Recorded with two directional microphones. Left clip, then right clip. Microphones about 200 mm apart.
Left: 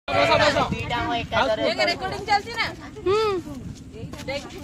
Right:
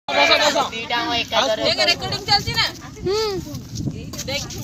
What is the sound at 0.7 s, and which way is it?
Speech, 5° right (ahead or behind).